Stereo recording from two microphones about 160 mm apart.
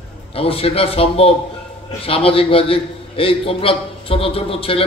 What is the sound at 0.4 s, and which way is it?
A man's voice, 35° left (ahead or behind).